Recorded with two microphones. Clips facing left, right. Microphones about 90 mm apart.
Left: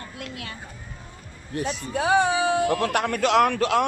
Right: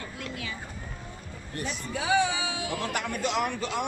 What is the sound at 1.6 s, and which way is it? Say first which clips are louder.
A man's voice: left 6 dB; 50° left (ahead or behind).